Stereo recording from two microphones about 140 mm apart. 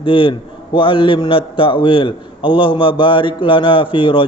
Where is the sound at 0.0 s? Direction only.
35° left (ahead or behind).